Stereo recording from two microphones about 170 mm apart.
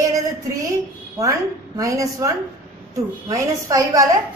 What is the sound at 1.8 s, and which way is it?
A woman's voice, 20° right (ahead or behind).